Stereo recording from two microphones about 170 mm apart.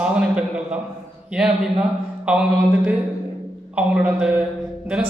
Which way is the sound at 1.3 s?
5° right (ahead or behind).